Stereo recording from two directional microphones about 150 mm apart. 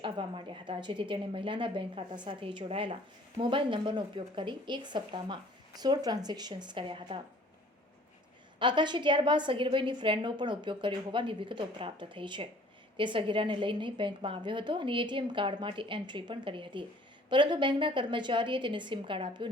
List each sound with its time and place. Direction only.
0.0 s a woman's voice: 35° right (ahead or behind)
8.5 s a woman's voice: 30° right (ahead or behind)